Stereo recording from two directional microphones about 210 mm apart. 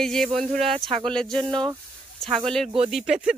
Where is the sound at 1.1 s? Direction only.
Centre (ahead or behind).